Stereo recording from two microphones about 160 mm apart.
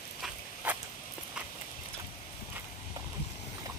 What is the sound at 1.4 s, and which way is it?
Clip-clop, 5° right (ahead or behind).